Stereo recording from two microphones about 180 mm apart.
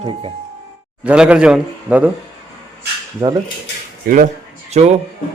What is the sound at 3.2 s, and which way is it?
Speech, 15° right (ahead or behind).